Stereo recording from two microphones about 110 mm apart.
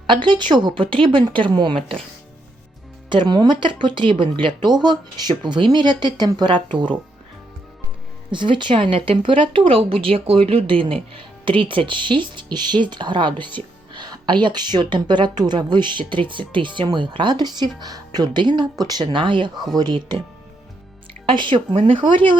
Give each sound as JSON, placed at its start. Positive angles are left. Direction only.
{"t": 0.1, "sound": "a woman's voice", "side_deg": -45}
{"t": 3.1, "sound": "a woman's voice", "side_deg": -45}
{"t": 8.3, "sound": "a woman's voice", "side_deg": -45}
{"t": 21.2, "sound": "a woman's voice", "side_deg": -50}